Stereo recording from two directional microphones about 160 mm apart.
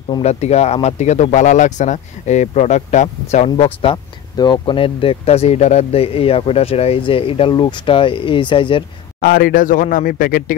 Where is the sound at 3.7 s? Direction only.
30° left (ahead or behind).